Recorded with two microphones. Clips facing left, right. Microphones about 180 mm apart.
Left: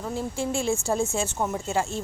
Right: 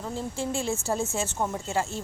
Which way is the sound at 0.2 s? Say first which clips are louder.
Left 2 dB; 15° left (ahead or behind).